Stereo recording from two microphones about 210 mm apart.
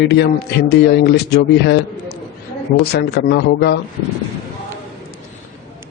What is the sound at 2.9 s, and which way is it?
Speech, 50° left (ahead or behind).